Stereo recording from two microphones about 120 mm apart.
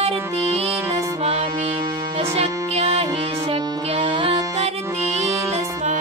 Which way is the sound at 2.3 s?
60° right (ahead or behind).